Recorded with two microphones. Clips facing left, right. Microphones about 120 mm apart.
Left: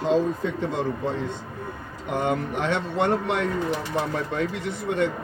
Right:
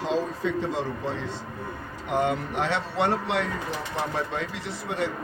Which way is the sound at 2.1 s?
50° left (ahead or behind).